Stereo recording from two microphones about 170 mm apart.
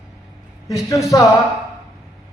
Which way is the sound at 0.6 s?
20° left (ahead or behind).